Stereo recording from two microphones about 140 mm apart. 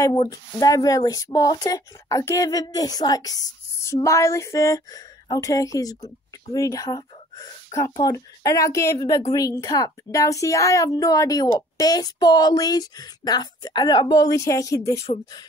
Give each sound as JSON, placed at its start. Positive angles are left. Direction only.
{"t": 0.3, "sound": "a woman's voice", "side_deg": 25}
{"t": 7.3, "sound": "a sound", "side_deg": 25}
{"t": 8.0, "sound": "a woman's voice", "side_deg": 25}